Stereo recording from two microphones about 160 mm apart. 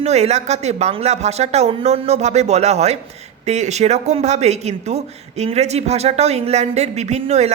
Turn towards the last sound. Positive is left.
turn(degrees=-40)  # may be behind; listen again after turning